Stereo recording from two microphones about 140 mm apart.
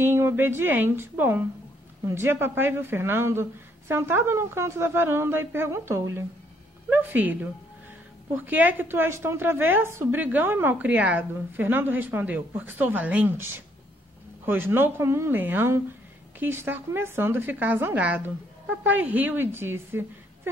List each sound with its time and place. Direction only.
0.0 s a woman's voice: 15° right (ahead or behind)